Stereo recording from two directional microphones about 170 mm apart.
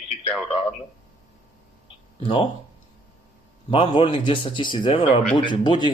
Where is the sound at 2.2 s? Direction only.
30° left (ahead or behind).